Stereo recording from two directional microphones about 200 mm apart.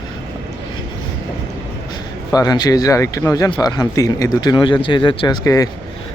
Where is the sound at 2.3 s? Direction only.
20° left (ahead or behind).